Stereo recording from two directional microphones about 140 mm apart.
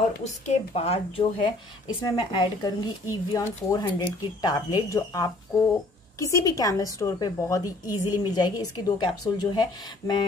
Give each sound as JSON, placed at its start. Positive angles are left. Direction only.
{"t": 0.2, "sound": "a woman's voice", "side_deg": 50}